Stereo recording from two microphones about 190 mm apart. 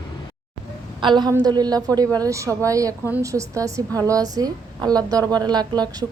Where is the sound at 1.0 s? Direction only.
25° right (ahead or behind).